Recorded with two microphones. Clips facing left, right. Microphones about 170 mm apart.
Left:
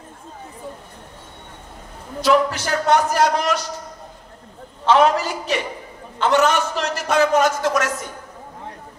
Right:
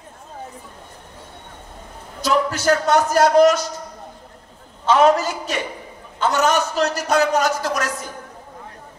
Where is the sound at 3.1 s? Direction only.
45° right (ahead or behind).